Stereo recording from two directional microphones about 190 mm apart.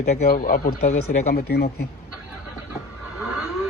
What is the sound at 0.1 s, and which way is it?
Speech, 45° left (ahead or behind).